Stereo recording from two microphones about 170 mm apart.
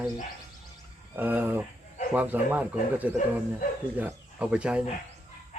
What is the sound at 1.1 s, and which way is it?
Speech, 10° right (ahead or behind).